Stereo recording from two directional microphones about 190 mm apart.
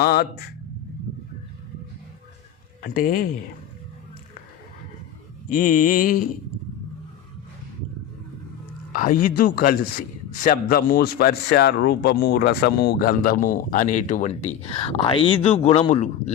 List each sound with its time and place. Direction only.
0.0 s a man's voice: 55° left (ahead or behind)
2.8 s a man's voice: 50° left (ahead or behind)
5.5 s a man's voice: 45° left (ahead or behind)
8.9 s a man's voice: 45° left (ahead or behind)